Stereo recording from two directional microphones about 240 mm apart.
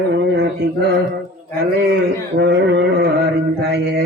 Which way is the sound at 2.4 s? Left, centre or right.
Right.